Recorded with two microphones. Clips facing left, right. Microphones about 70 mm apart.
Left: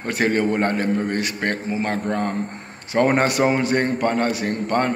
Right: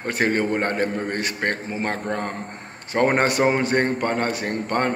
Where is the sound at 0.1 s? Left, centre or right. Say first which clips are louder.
Left 2 dB; right.